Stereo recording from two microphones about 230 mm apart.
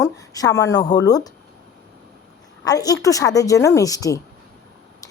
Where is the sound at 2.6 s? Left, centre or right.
Centre.